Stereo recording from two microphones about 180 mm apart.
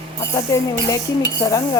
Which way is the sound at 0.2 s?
15° left (ahead or behind).